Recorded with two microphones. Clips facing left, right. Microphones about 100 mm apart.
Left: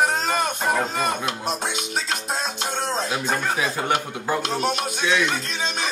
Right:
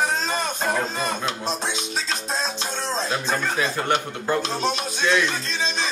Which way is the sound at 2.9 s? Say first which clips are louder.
Right 3 dB; 15° left (ahead or behind).